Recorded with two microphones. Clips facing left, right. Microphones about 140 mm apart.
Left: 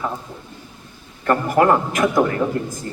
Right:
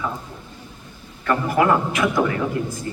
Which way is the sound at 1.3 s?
45° left (ahead or behind).